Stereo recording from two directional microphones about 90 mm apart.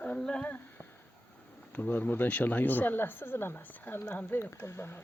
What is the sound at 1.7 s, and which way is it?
Speech, 20° left (ahead or behind).